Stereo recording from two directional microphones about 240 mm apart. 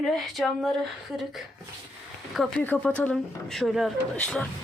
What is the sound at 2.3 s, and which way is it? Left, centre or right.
Speech, centre.